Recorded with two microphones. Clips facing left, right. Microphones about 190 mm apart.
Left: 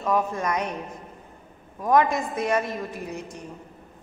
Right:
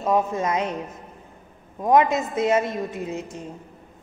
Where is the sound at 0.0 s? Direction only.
20° right (ahead or behind).